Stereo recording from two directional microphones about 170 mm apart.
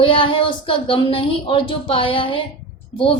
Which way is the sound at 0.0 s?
30° left (ahead or behind).